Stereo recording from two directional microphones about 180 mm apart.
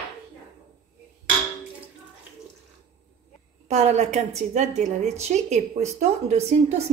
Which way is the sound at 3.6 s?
35° right (ahead or behind).